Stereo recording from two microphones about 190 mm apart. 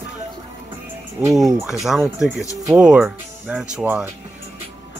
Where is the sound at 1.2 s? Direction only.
10° right (ahead or behind).